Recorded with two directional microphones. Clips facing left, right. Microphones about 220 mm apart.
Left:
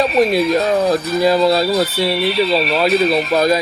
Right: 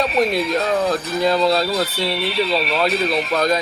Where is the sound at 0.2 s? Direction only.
5° left (ahead or behind).